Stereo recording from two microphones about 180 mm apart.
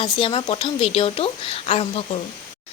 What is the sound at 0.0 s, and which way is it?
Speech, 25° left (ahead or behind).